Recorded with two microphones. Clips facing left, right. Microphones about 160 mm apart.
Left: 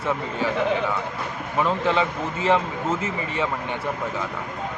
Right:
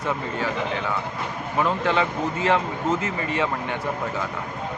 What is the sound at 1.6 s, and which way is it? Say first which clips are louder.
Speech: left 1 dB; centre (ahead or behind).